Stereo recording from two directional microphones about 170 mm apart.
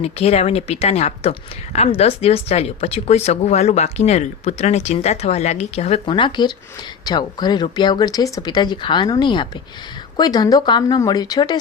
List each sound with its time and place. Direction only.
0.0 s speech: 35° left (ahead or behind)